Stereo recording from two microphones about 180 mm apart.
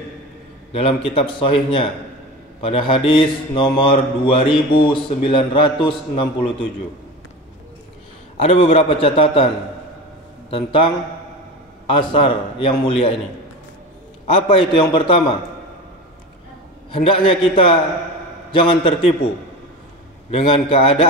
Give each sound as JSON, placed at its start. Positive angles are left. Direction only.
{"t": 0.7, "sound": "a man's voice", "side_deg": 35}
{"t": 8.4, "sound": "a man's voice", "side_deg": 35}
{"t": 10.5, "sound": "a man's voice", "side_deg": 30}
{"t": 11.9, "sound": "a man's voice", "side_deg": 30}
{"t": 14.2, "sound": "a man's voice", "side_deg": 30}
{"t": 16.9, "sound": "a man's voice", "side_deg": 30}
{"t": 20.2, "sound": "a man's voice", "side_deg": 35}